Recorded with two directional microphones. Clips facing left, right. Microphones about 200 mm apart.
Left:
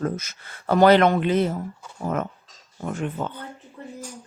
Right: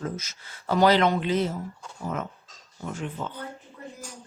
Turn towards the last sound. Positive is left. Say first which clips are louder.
# left 5 dB
turn(degrees=55)  # may be behind; listen again after turning